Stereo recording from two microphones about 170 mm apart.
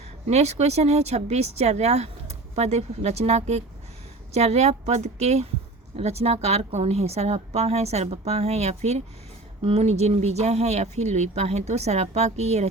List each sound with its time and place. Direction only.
0.3 s speech: 40° right (ahead or behind)